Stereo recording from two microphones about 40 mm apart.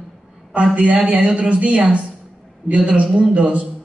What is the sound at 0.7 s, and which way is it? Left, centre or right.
A woman's voice, right.